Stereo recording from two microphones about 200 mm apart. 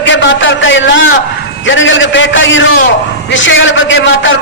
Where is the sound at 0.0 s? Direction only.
65° left (ahead or behind).